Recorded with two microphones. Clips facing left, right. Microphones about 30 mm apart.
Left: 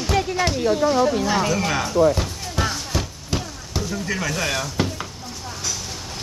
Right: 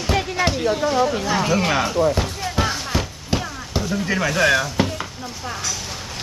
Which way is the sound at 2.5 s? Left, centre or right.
Centre.